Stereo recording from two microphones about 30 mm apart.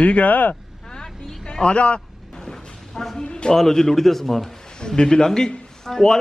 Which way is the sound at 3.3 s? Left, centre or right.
Left.